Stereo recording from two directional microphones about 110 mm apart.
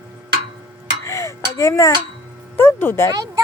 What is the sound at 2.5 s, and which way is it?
Speech, 20° left (ahead or behind).